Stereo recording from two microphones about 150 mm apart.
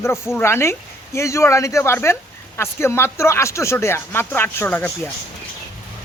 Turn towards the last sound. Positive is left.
turn(degrees=10)  # may be behind; listen again after turning